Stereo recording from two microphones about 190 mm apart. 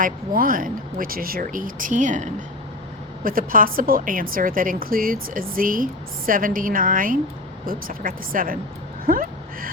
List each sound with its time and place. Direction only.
0.0 s a woman's voice: 45° right (ahead or behind)